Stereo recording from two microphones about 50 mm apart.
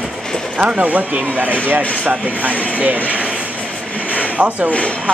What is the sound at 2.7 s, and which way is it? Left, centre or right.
Speech, right.